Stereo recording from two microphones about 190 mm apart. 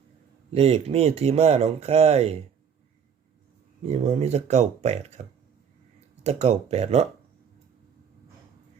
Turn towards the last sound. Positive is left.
turn(degrees=-35)  # may be behind; listen again after turning